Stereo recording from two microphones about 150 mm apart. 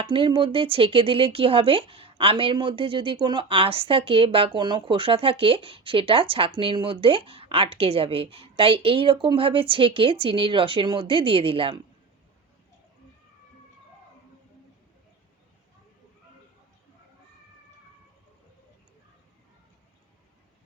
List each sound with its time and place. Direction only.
0.0 s speech: 35° right (ahead or behind)